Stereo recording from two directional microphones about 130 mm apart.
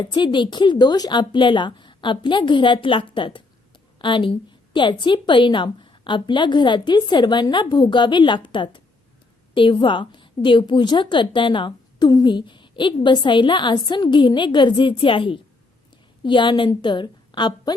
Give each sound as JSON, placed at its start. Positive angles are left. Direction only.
{"t": 0.0, "sound": "a woman's voice", "side_deg": 35}